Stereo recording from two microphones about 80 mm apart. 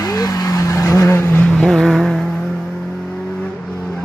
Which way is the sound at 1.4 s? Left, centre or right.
Centre.